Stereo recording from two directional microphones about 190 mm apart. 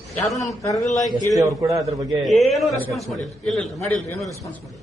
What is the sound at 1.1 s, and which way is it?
Speech, 15° right (ahead or behind).